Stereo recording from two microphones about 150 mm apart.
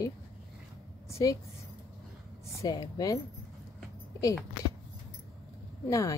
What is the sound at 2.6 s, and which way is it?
A woman's voice, 25° left (ahead or behind).